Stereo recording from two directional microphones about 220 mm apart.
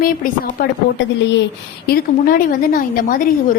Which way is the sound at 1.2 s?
55° left (ahead or behind).